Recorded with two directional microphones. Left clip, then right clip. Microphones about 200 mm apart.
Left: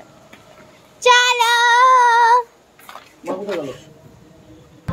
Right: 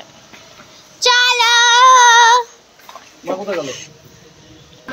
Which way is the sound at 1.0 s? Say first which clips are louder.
Right 1 dB; 15° left (ahead or behind).